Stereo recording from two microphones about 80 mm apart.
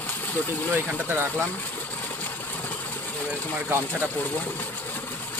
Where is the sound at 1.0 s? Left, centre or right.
Right.